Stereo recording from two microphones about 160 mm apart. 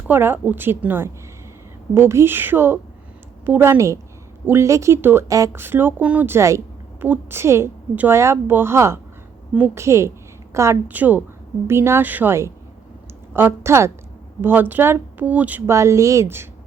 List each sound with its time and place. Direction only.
0.1 s speech: 15° right (ahead or behind)